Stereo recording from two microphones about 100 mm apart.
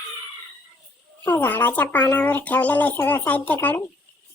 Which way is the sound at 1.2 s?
15° left (ahead or behind).